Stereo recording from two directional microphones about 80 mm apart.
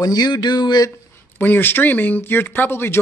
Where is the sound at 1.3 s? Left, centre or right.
Left.